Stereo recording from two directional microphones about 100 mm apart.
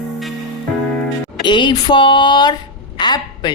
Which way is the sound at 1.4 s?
55° left (ahead or behind).